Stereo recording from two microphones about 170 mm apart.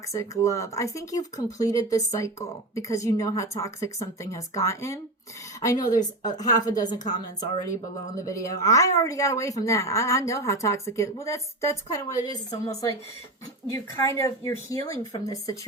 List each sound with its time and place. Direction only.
0.1 s speech: 20° left (ahead or behind)